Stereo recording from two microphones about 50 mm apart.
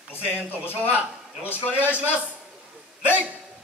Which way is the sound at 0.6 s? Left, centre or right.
Left.